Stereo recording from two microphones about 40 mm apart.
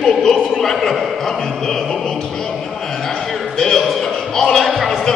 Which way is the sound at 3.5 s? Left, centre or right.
Centre.